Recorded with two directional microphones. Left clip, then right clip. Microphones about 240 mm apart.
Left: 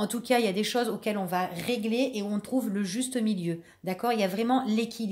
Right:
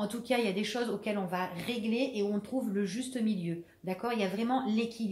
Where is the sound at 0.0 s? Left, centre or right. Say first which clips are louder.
Left 5 dB; left.